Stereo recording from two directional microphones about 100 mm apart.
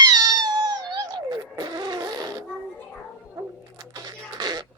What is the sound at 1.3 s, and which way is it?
Fart, 45° right (ahead or behind).